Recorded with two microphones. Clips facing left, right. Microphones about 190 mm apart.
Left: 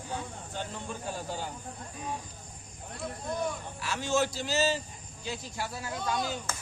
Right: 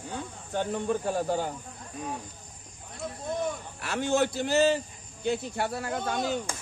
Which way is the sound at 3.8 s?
55° right (ahead or behind).